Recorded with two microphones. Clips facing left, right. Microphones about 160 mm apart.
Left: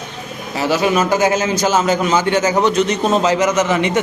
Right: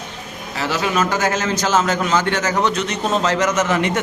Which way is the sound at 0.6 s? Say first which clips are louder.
Left 4 dB; 10° left (ahead or behind).